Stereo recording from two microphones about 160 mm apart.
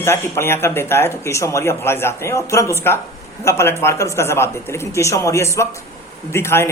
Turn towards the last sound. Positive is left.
turn(degrees=15)  # may be behind; listen again after turning